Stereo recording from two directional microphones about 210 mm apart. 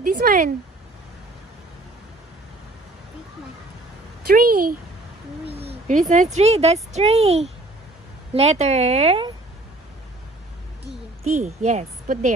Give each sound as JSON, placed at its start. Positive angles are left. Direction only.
{"t": 0.2, "sound": "speech", "side_deg": -40}
{"t": 4.3, "sound": "speech", "side_deg": -45}
{"t": 5.4, "sound": "speech", "side_deg": -30}
{"t": 11.2, "sound": "speech", "side_deg": -30}